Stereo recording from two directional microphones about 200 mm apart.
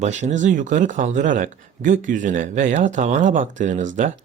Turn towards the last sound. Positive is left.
turn(degrees=-40)  # may be behind; listen again after turning